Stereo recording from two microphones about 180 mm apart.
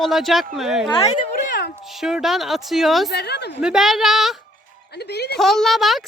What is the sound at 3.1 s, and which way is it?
Speech, 65° left (ahead or behind).